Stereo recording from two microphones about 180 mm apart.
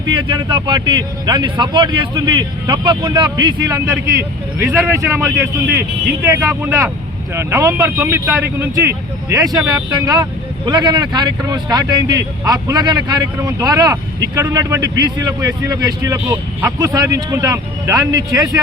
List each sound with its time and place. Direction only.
0.2 s speech: 25° right (ahead or behind)
10.7 s speech: 25° right (ahead or behind)